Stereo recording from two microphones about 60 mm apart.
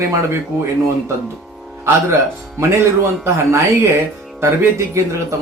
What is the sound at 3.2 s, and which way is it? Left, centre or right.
Speech, right.